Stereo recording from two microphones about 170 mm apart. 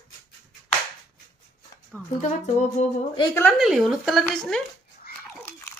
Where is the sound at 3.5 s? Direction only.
Centre (ahead or behind).